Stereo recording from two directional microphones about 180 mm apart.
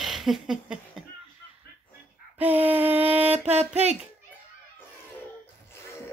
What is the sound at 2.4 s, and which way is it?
Female singing, 10° right (ahead or behind).